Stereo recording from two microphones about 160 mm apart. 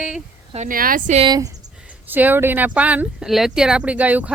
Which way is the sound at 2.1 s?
10° right (ahead or behind).